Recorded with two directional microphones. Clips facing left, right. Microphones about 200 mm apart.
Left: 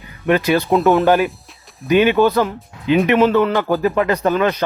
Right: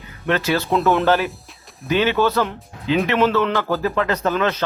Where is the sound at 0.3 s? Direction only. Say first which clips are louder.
Left 5 dB; 15° left (ahead or behind).